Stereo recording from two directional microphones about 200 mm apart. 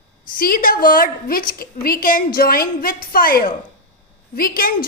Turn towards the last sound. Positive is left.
turn(degrees=45)  # may be behind; listen again after turning